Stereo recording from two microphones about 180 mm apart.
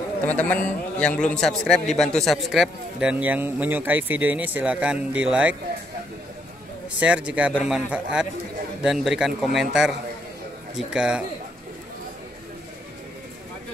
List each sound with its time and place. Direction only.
0.3 s a man's voice: 10° left (ahead or behind)
7.0 s a man's voice: 5° right (ahead or behind)